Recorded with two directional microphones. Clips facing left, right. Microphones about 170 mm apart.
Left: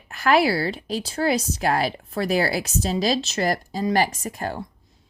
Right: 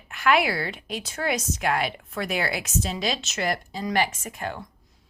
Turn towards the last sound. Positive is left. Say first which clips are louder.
# left 4 dB
turn(degrees=35)  # may be behind; listen again after turning